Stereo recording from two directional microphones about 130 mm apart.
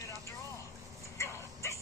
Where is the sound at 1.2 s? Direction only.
20° left (ahead or behind).